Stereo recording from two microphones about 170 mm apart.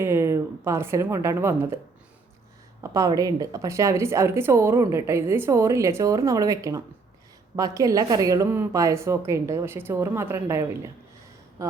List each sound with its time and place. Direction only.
0.0 s speech: 15° right (ahead or behind)
2.8 s a woman's voice: 20° right (ahead or behind)